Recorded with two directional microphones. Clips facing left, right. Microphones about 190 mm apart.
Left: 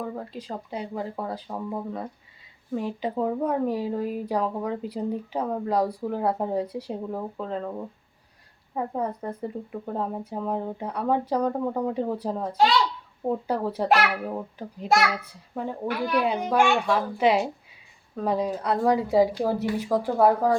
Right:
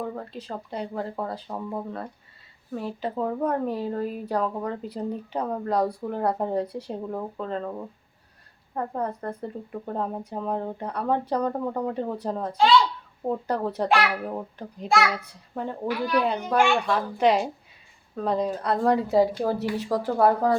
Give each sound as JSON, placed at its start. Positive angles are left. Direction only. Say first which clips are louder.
{"t": 0.2, "sound": "a child's voice", "louder": "even", "side_deg": 10}